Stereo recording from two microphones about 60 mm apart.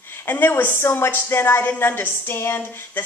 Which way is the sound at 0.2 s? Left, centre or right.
Left.